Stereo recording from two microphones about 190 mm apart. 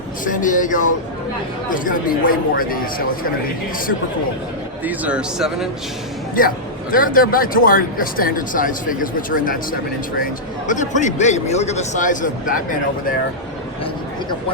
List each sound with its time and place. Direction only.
0.4 s speech: 45° left (ahead or behind)
4.8 s speech: 10° right (ahead or behind)
6.4 s speech: 45° left (ahead or behind)
10.7 s a man's voice: 40° left (ahead or behind)